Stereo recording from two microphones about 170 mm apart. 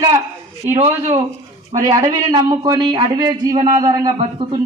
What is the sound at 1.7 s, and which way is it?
Speech, 20° right (ahead or behind).